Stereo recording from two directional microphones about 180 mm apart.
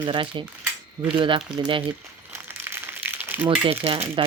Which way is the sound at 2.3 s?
10° right (ahead or behind).